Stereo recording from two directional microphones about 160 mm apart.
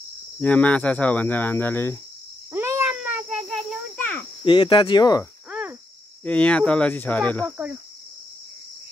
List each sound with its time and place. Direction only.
0.4 s speech: 10° left (ahead or behind)
2.5 s a sound: 15° right (ahead or behind)
3.9 s insect: 10° left (ahead or behind)
4.5 s cricket: 30° left (ahead or behind)
5.5 s cricket: 10° right (ahead or behind)
6.2 s speech: 10° left (ahead or behind)
7.5 s cricket: 5° right (ahead or behind)